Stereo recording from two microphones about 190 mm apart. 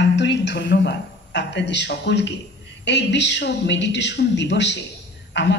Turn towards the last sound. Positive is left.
turn(degrees=65)  # may be behind; listen again after turning